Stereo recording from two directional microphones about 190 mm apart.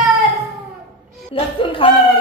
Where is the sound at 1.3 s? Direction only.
30° left (ahead or behind).